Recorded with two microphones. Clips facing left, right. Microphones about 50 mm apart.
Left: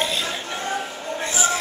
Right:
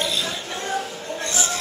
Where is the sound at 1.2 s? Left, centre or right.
Centre.